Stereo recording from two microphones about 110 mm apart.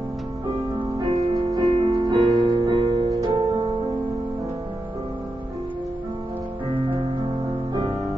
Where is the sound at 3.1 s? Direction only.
35° right (ahead or behind).